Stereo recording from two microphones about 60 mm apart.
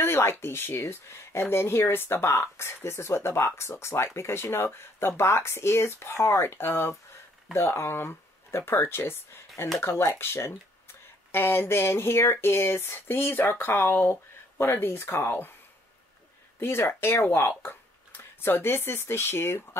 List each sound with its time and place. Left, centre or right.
0.0 s speech: left
16.5 s speech: left